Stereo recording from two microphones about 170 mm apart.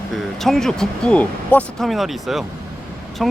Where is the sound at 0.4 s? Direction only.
Centre (ahead or behind).